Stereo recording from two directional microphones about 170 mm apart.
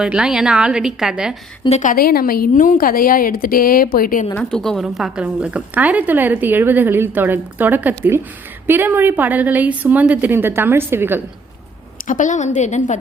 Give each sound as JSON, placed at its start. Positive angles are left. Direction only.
{"t": 0.0, "sound": "a woman's voice", "side_deg": -5}
{"t": 1.8, "sound": "a woman's voice", "side_deg": 55}
{"t": 4.4, "sound": "a woman's voice", "side_deg": 5}
{"t": 12.0, "sound": "a woman's voice", "side_deg": 50}